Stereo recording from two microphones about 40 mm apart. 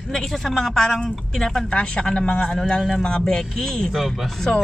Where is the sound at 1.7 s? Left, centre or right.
Left.